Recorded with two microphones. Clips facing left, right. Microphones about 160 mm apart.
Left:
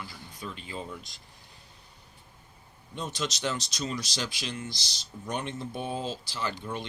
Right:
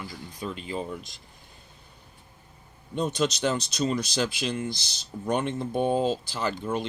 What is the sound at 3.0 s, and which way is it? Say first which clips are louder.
Speech: right 8 dB; 55° right (ahead or behind).